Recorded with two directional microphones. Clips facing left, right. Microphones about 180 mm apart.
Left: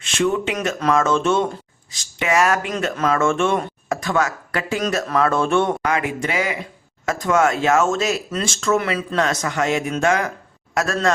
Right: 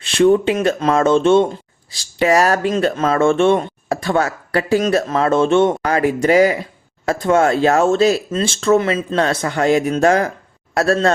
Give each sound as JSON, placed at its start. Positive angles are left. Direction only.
{"t": 0.0, "sound": "speech", "side_deg": -35}
{"t": 5.8, "sound": "speech", "side_deg": -35}